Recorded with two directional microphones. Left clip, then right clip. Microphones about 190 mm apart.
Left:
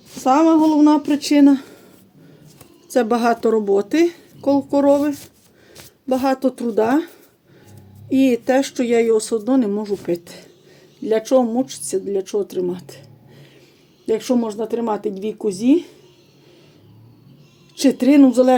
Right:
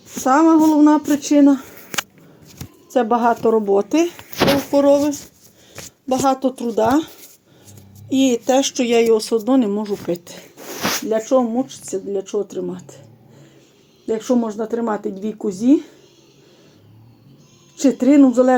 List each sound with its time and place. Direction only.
0.3 s speech: centre (ahead or behind)
2.9 s speech: 15° left (ahead or behind)
8.1 s speech: 15° left (ahead or behind)
14.1 s speech: 10° left (ahead or behind)
17.7 s speech: 5° left (ahead or behind)